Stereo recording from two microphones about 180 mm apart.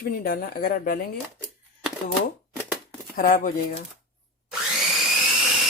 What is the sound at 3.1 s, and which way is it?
Cutlery, 50° left (ahead or behind).